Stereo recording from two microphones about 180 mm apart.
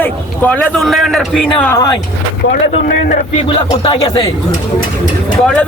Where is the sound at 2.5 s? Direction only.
55° left (ahead or behind).